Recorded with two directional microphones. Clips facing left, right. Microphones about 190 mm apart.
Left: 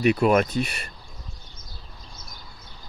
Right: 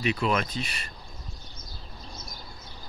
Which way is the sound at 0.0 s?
50° left (ahead or behind).